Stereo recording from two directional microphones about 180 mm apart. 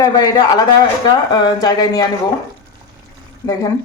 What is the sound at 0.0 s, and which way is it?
Speech, 20° left (ahead or behind).